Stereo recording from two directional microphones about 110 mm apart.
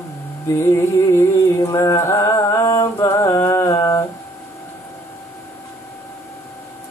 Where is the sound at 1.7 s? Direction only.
30° left (ahead or behind).